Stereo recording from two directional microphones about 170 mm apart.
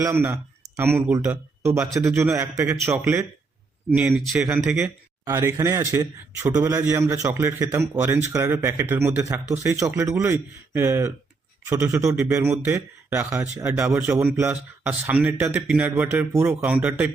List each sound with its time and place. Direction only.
0.0 s a man's voice: 15° right (ahead or behind)